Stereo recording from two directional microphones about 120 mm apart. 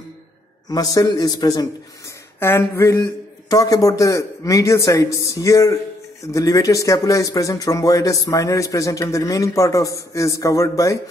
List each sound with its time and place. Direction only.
0.7 s a man's voice: 30° left (ahead or behind)
2.4 s speech: 20° left (ahead or behind)